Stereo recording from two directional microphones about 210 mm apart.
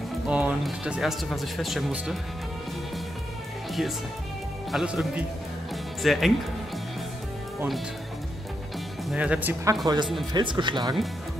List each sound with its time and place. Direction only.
0.3 s speech: 5° right (ahead or behind)
4.6 s speech: centre (ahead or behind)
9.1 s speech: 5° right (ahead or behind)